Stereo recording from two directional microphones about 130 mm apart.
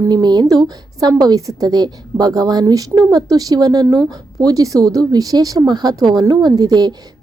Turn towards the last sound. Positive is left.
turn(degrees=-30)  # may be behind; listen again after turning